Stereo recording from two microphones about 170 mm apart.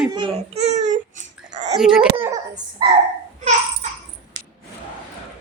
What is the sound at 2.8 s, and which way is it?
Speech, 25° right (ahead or behind).